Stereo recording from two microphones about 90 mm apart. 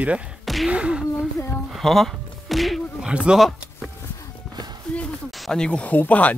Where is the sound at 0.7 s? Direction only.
10° right (ahead or behind).